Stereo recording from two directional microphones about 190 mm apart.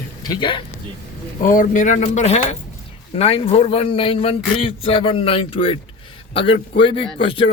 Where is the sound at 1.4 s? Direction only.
45° left (ahead or behind).